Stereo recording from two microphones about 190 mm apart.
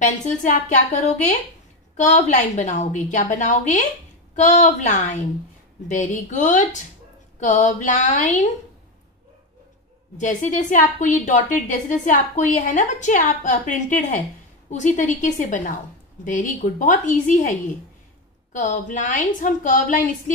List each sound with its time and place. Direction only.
0.2 s a woman's voice: 40° left (ahead or behind)
10.1 s a woman's voice: 40° left (ahead or behind)